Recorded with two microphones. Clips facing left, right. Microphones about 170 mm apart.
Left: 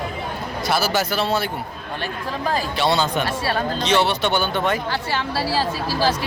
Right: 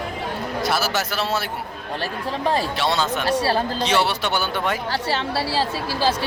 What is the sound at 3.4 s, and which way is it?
Speech, 30° right (ahead or behind).